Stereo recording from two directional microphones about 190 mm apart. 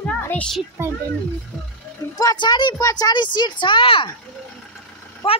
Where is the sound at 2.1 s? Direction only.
20° left (ahead or behind).